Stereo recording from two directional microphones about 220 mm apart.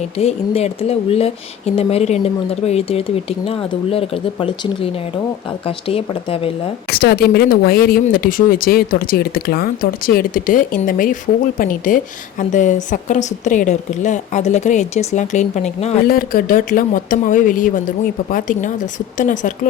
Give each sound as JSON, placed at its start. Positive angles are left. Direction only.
{"t": 0.2, "sound": "speech", "side_deg": 30}
{"t": 6.9, "sound": "a woman's voice", "side_deg": 45}
{"t": 16.0, "sound": "a woman's voice", "side_deg": 40}